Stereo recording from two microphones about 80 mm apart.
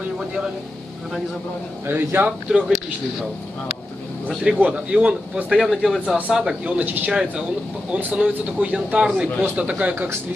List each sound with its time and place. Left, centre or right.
1.9 s speech: right
4.3 s speech: centre
5.6 s speech: centre
6.0 s speech: centre
7.1 s speech: centre
7.9 s speech: right